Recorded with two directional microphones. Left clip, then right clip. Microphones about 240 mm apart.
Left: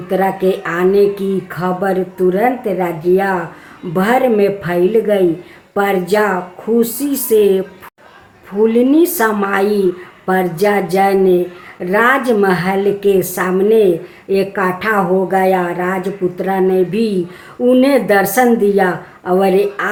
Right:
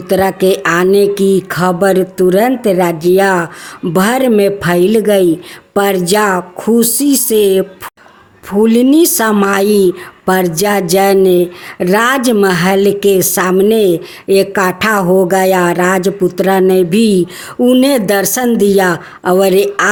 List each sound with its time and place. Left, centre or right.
0.1 s speech: right